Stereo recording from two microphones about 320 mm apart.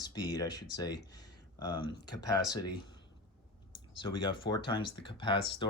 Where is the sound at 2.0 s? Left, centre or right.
Centre.